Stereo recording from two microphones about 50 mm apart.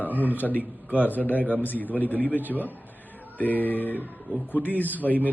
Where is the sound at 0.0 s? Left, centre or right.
Left.